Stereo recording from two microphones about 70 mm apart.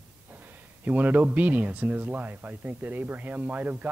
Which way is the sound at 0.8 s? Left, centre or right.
Right.